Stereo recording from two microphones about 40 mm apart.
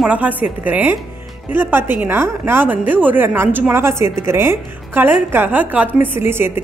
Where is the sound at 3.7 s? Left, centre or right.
Right.